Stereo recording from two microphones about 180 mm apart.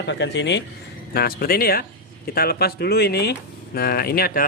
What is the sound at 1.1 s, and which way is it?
Speech, 60° left (ahead or behind).